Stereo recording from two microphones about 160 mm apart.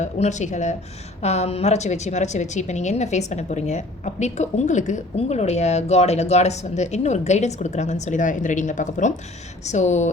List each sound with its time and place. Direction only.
0.0 s a woman's voice: 45° left (ahead or behind)